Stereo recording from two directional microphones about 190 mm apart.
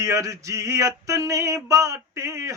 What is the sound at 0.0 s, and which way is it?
Male singing, 15° right (ahead or behind).